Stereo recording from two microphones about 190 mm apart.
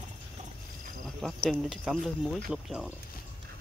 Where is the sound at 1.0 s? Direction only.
Centre (ahead or behind).